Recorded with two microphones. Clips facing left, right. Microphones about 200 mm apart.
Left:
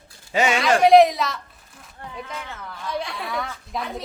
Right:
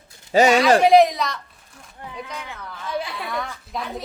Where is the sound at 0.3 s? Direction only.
40° right (ahead or behind).